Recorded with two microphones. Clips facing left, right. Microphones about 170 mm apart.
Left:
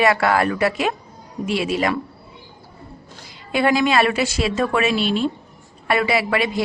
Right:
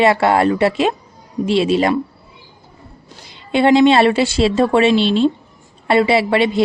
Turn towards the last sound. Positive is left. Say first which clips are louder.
# right 6 dB
turn(degrees=-25)  # may be behind; listen again after turning